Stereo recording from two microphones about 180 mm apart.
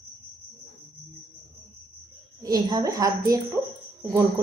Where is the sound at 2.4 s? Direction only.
20° right (ahead or behind).